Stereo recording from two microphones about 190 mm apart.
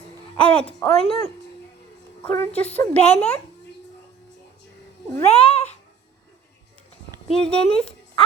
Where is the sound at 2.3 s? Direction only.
10° left (ahead or behind).